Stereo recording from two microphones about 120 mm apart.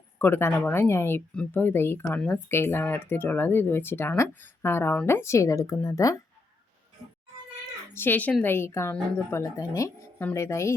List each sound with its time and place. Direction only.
0.2 s a woman's voice: 20° left (ahead or behind)
2.1 s speech: 10° left (ahead or behind)
2.5 s a woman's voice: 20° left (ahead or behind)
7.9 s a woman's voice: 15° left (ahead or behind)